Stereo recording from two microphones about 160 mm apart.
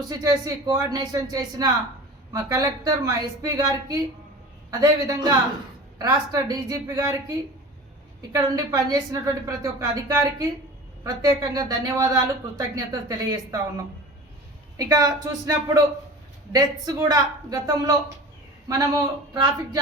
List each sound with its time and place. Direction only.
0.1 s speech: 20° right (ahead or behind)
19.3 s speech: 25° right (ahead or behind)